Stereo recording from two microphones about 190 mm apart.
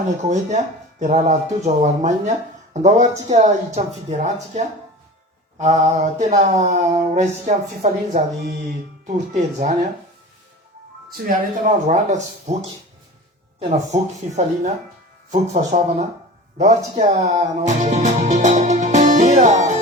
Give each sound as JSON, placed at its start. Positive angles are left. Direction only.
{"t": 0.3, "sound": "speech", "side_deg": -40}
{"t": 3.3, "sound": "speech", "side_deg": -40}
{"t": 11.3, "sound": "speech", "side_deg": -40}
{"t": 13.6, "sound": "speech", "side_deg": -35}